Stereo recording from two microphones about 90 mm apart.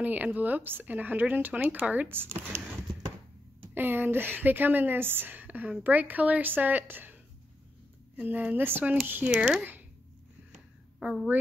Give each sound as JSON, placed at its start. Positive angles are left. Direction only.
{"t": 0.0, "sound": "a woman's voice", "side_deg": -20}
{"t": 8.2, "sound": "a woman's voice", "side_deg": -15}
{"t": 10.5, "sound": "a sound", "side_deg": -15}